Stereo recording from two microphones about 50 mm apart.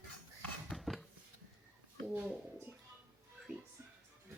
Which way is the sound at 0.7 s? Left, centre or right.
Centre.